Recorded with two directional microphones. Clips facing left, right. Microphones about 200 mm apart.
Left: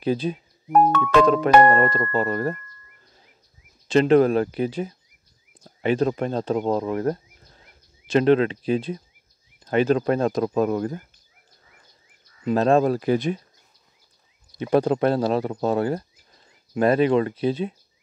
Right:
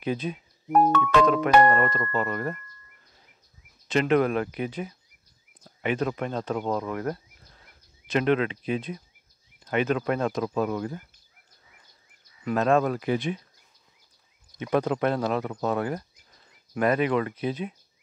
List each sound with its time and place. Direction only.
0.0 s speech: 35° left (ahead or behind)
3.8 s speech: 30° left (ahead or behind)
12.4 s speech: 30° left (ahead or behind)
14.6 s speech: 30° left (ahead or behind)